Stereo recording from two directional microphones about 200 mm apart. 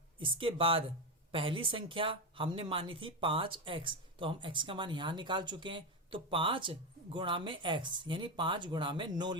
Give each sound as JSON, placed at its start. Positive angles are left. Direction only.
{"t": 0.2, "sound": "speech", "side_deg": -25}